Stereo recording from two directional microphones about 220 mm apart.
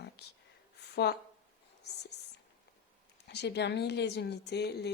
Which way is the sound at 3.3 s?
50° left (ahead or behind).